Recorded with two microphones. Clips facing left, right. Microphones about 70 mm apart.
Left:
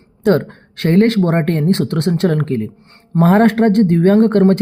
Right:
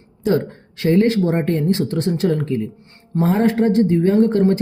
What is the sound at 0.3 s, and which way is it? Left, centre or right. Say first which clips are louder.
Speech: left 4 dB; left.